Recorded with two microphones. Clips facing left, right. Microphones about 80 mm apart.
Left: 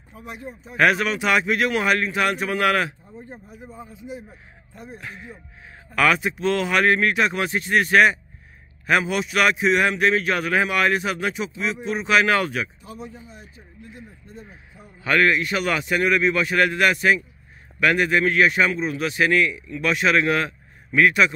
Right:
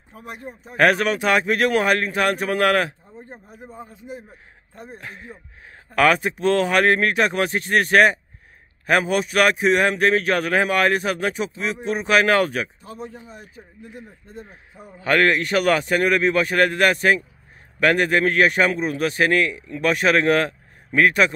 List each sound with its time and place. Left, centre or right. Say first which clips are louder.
0.1 s a man's voice: even; right
13.2 s a man's voice: right 3 dB; right